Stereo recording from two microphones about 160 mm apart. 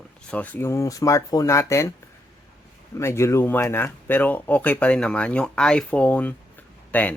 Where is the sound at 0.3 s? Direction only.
10° left (ahead or behind).